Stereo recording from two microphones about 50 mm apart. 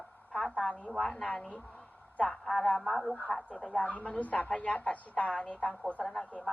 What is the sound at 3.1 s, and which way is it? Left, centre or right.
Speech, left.